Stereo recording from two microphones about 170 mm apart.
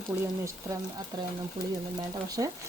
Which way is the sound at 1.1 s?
25° right (ahead or behind).